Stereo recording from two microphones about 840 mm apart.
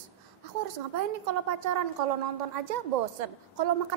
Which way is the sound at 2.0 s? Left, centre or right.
Right.